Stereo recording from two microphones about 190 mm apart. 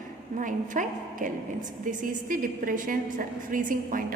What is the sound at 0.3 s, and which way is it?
A woman's voice, 45° right (ahead or behind).